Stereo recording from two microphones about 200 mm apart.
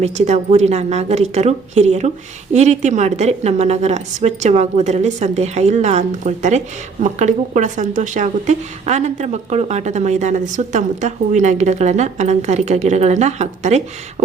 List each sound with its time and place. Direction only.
0.0 s a woman's voice: 35° right (ahead or behind)